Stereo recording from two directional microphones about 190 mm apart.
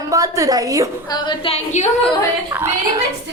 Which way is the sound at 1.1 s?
25° left (ahead or behind).